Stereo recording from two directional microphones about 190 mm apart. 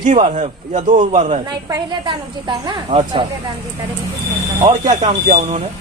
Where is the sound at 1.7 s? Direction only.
20° right (ahead or behind).